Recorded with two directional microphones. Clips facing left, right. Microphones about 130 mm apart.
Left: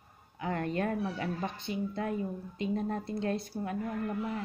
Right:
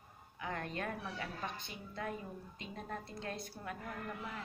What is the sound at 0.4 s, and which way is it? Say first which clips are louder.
Speech: left 9 dB; 35° left (ahead or behind).